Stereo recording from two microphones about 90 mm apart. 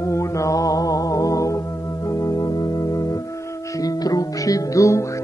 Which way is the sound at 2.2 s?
45° left (ahead or behind).